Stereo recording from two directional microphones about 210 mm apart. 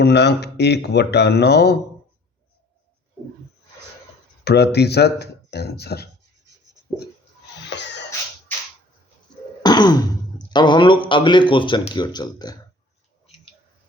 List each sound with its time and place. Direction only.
0.0 s speech: 55° left (ahead or behind)
4.4 s speech: 50° left (ahead or behind)
7.7 s a sound: 55° left (ahead or behind)
9.6 s speech: 20° left (ahead or behind)